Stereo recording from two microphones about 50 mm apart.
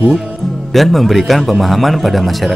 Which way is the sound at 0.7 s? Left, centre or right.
Centre.